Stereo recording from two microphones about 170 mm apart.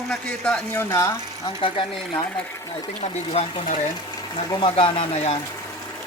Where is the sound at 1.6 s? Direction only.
30° left (ahead or behind).